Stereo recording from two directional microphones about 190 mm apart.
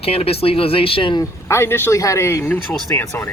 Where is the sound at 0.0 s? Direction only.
30° left (ahead or behind).